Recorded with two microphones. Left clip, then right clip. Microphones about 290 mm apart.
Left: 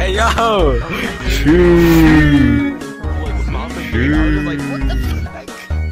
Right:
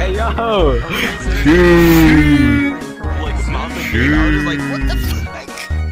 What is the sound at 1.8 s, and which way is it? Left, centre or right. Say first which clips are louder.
Music: even; centre.